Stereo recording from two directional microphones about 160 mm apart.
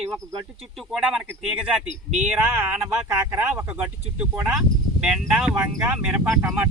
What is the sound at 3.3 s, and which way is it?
Speech, 10° right (ahead or behind).